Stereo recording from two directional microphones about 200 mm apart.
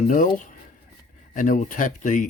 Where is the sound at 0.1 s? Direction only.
40° left (ahead or behind).